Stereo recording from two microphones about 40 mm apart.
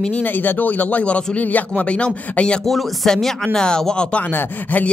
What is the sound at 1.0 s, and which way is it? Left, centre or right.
Speech, left.